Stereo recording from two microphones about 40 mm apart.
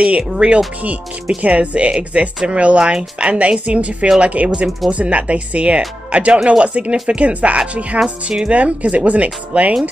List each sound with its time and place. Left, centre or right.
0.4 s speech: right